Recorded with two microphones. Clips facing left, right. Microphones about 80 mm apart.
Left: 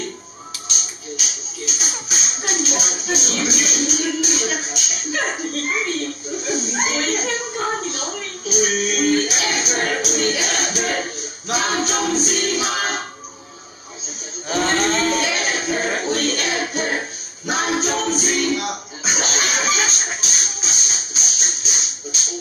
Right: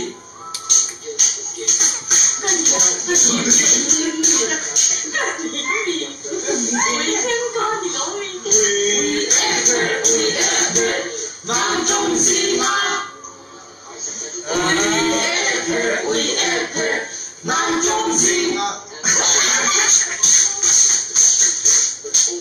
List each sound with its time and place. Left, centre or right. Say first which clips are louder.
1.7 s music: left 2 dB; right
15.0 s music: right 1 dB; right
17.5 s speech: right 3 dB; right
20.2 s music: right 1 dB; right